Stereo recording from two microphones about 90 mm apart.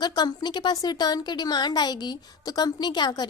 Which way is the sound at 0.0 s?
50° left (ahead or behind).